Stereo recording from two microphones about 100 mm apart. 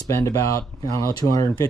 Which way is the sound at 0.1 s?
30° left (ahead or behind).